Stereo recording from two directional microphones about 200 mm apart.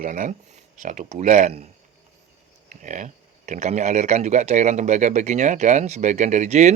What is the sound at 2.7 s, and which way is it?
Speech, 40° right (ahead or behind).